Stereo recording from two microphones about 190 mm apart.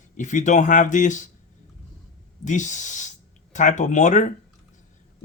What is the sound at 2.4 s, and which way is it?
Speech, 40° left (ahead or behind).